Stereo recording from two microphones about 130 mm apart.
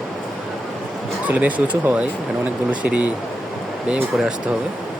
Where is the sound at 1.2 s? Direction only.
10° right (ahead or behind).